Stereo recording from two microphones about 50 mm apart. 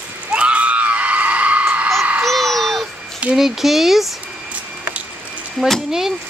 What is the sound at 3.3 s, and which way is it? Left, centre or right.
Speech, centre.